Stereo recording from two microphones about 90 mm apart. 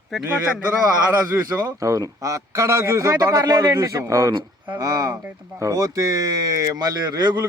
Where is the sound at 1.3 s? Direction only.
25° right (ahead or behind).